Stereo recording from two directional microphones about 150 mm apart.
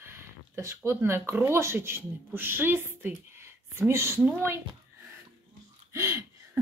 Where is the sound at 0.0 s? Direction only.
15° right (ahead or behind).